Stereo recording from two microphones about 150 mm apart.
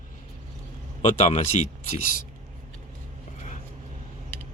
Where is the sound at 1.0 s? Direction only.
50° left (ahead or behind).